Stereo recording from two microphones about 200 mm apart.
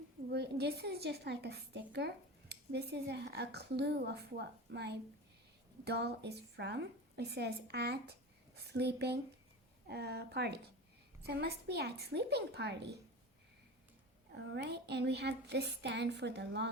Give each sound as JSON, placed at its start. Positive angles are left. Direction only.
{"t": 0.3, "sound": "a woman's voice", "side_deg": -55}
{"t": 14.5, "sound": "a woman's voice", "side_deg": -60}